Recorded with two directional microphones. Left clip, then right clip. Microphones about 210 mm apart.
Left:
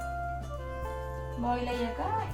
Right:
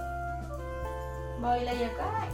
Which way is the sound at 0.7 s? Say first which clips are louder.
Even; centre (ahead or behind).